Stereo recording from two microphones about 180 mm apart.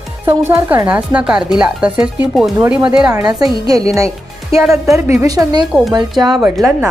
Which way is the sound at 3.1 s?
20° right (ahead or behind).